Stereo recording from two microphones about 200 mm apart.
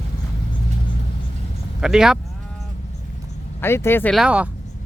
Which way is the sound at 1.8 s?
5° right (ahead or behind).